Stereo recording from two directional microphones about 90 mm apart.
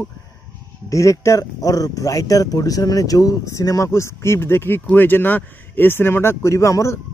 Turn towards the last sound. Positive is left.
turn(degrees=35)  # may be behind; listen again after turning